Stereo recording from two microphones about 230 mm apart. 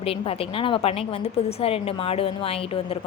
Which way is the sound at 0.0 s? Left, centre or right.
Left.